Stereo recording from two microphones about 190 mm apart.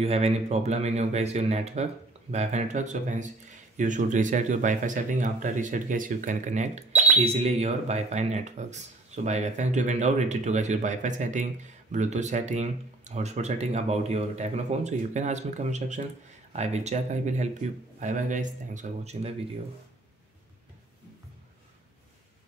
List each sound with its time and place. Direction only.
0.0 s speech: 35° right (ahead or behind)
6.9 s cash register: 5° right (ahead or behind)
7.2 s speech: 35° right (ahead or behind)